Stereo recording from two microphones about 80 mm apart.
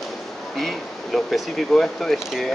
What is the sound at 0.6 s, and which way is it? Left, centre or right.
Speech, centre.